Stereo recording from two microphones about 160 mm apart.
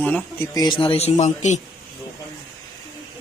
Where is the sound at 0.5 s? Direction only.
30° left (ahead or behind); by 1.5 s 50° left (ahead or behind).